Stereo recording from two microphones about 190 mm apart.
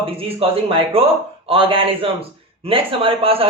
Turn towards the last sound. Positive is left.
turn(degrees=-30)  # may be behind; listen again after turning